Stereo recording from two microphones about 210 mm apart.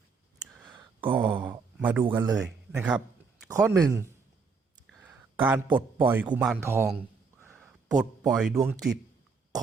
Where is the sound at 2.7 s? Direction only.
5° right (ahead or behind).